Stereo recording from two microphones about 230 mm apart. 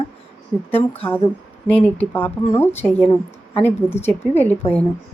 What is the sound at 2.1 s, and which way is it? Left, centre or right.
Speech, centre.